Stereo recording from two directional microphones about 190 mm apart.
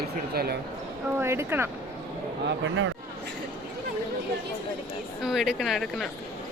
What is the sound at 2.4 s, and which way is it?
Speech, 75° right (ahead or behind).